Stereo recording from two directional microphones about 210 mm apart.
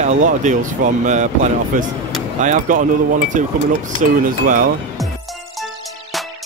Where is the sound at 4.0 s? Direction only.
40° right (ahead or behind).